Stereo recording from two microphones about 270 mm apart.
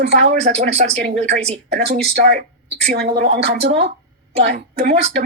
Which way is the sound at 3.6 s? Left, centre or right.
Right.